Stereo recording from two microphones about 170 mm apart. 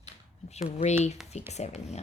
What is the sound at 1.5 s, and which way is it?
Speech, 40° left (ahead or behind).